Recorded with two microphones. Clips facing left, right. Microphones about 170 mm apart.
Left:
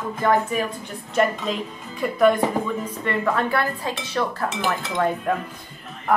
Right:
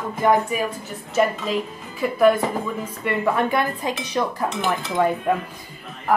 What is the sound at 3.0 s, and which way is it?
Dishes, 15° right (ahead or behind).